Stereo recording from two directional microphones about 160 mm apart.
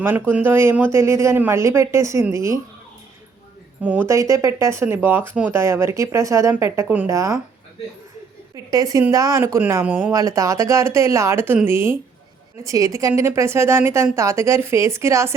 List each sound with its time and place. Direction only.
0.0 s a woman's voice: 10° right (ahead or behind)
3.8 s a woman's voice: 10° right (ahead or behind)
8.5 s a woman's voice: 20° right (ahead or behind)